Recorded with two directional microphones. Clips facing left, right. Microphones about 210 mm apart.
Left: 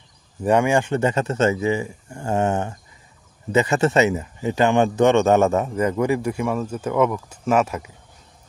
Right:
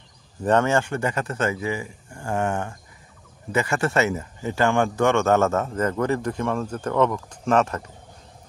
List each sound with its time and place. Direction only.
0.4 s a man's voice: 10° left (ahead or behind)